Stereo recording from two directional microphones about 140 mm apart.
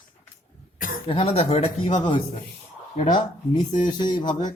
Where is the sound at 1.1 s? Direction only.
45° left (ahead or behind).